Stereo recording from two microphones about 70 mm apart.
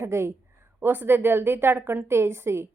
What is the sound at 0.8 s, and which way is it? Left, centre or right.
A woman's voice, right.